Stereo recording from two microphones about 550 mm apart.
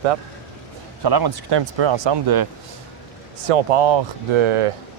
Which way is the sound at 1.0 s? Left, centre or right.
Right.